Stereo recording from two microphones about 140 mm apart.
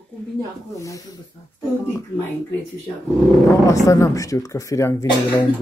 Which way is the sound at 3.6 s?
20° left (ahead or behind).